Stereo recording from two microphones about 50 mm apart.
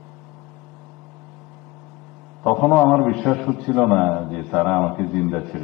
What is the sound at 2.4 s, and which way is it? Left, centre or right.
A man's voice, centre.